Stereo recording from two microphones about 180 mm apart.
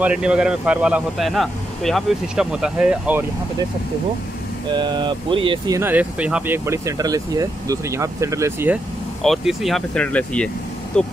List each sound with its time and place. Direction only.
0.0 s speech: 5° right (ahead or behind)
4.7 s speech: 25° right (ahead or behind)
5.8 s speech: 10° right (ahead or behind)
9.2 s speech: centre (ahead or behind)